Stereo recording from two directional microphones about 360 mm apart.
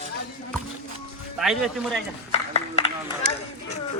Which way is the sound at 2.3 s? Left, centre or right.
Centre.